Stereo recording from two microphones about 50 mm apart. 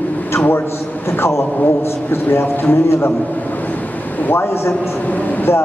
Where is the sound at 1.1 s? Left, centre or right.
Left.